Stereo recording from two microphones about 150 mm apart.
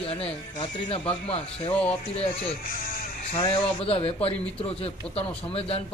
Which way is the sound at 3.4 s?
35° left (ahead or behind).